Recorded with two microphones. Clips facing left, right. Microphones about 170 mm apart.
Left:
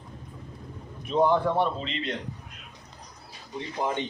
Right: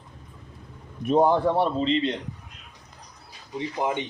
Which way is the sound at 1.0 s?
50° right (ahead or behind).